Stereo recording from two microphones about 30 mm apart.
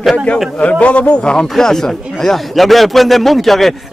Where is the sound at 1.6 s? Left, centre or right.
Centre.